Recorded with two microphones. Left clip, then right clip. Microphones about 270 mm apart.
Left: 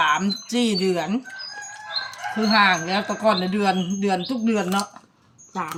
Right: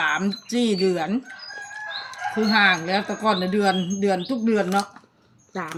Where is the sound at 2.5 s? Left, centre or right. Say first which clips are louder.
Left 1 dB; centre.